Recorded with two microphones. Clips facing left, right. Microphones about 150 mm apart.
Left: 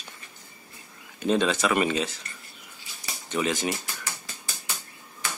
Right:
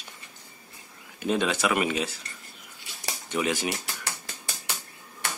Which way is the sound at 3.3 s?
10° right (ahead or behind).